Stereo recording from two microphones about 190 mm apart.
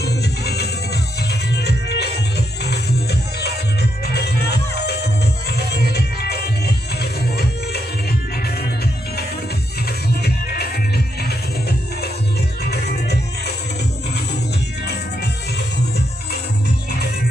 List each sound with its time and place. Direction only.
0.0 s music: 60° left (ahead or behind)
10.2 s music: 55° left (ahead or behind)